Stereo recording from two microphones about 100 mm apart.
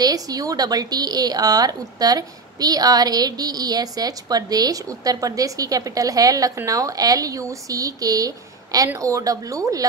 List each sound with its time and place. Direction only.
0.0 s a woman's voice: 40° right (ahead or behind)